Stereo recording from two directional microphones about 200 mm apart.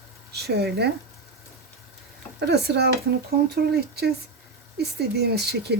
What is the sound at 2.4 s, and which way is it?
Speech, 55° right (ahead or behind).